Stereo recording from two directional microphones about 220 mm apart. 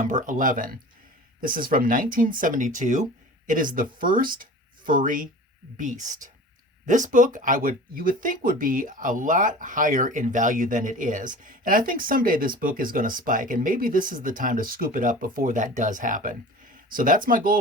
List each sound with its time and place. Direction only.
0.0 s speech: 35° right (ahead or behind)